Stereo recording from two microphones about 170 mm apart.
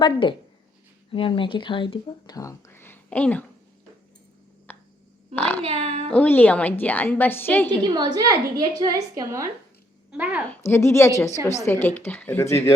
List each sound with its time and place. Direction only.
0.0 s speech: 30° left (ahead or behind); by 3.4 s 10° left (ahead or behind)
4.7 s a sound: 10° left (ahead or behind)
5.3 s a woman's voice: 10° left (ahead or behind)
5.6 s speech: 35° right (ahead or behind)
6.1 s a woman's voice: 10° left (ahead or behind)
7.9 s a woman's voice: 25° right (ahead or behind); by 10.4 s 10° right (ahead or behind)
10.5 s a woman's voice: 15° left (ahead or behind)